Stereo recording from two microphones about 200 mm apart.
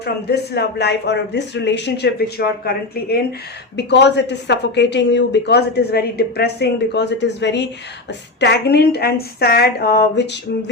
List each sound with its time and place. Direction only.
0.0 s a woman's voice: 55° left (ahead or behind)